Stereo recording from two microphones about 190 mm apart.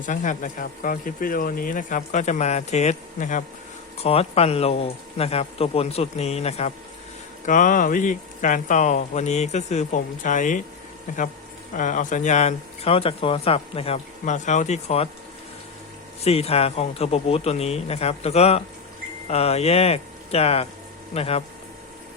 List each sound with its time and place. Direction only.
0.0 s speech: 40° left (ahead or behind)
11.7 s speech: 40° left (ahead or behind)
16.2 s speech: 35° left (ahead or behind)